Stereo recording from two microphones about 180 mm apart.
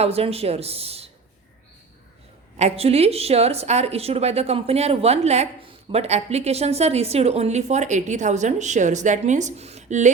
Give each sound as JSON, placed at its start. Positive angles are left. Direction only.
{"t": 0.0, "sound": "a woman's voice", "side_deg": -35}
{"t": 2.6, "sound": "a woman's voice", "side_deg": -35}